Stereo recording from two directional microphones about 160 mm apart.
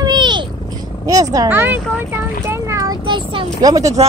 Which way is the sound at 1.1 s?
20° right (ahead or behind).